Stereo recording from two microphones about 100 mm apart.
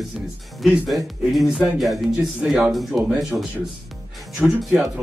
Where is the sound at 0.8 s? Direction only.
Centre (ahead or behind).